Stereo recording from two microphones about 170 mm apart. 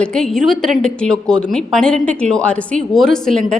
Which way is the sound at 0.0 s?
5° left (ahead or behind).